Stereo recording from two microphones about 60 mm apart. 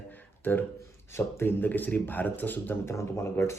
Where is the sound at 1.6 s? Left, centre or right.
Left.